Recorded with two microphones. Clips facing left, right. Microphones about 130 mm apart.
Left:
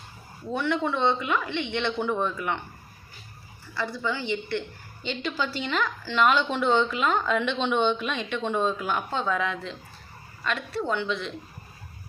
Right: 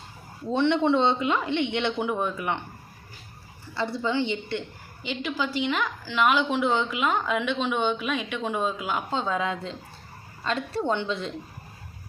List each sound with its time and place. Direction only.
0.5 s speech: 25° right (ahead or behind)
3.8 s speech: 25° right (ahead or behind)
5.0 s a woman's voice: 10° right (ahead or behind); by 11.3 s 30° right (ahead or behind)